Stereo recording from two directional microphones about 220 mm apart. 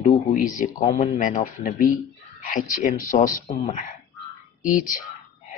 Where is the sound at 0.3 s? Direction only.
35° left (ahead or behind).